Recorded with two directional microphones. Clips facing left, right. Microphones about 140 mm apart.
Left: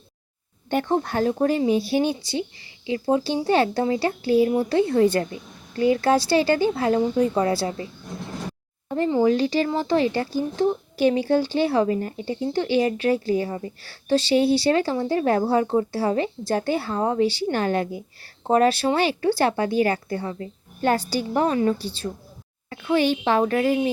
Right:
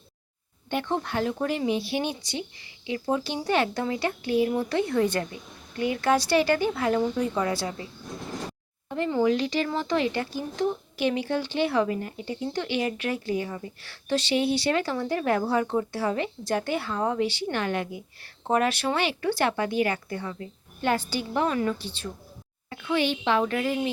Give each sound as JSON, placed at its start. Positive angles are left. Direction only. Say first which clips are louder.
{"t": 0.7, "sound": "a woman's voice", "louder": "left 5 dB", "side_deg": 40}
{"t": 9.2, "sound": "a woman's voice", "louder": "left 3 dB", "side_deg": 35}